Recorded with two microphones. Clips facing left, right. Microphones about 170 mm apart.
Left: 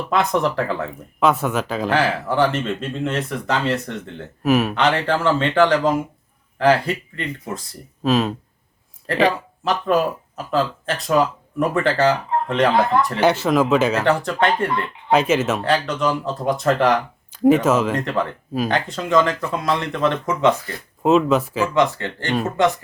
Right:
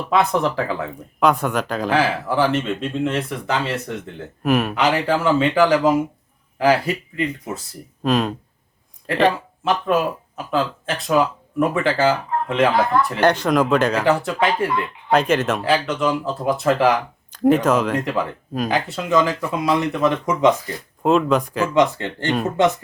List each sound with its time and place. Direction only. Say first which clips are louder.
0.1 s speech: right 1 dB; centre (ahead or behind)
17.9 s speech: even; 10° right (ahead or behind)
21.0 s speech: left 1 dB; 5° left (ahead or behind)
21.8 s speech: right 3 dB; 20° right (ahead or behind)